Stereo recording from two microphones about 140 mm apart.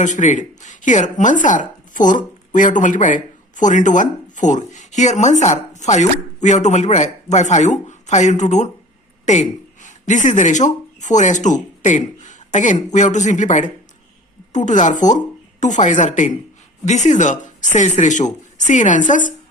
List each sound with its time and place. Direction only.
0.0 s speech: 60° left (ahead or behind)